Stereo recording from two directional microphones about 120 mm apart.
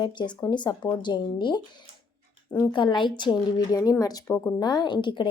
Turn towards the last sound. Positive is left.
turn(degrees=40)  # may be behind; listen again after turning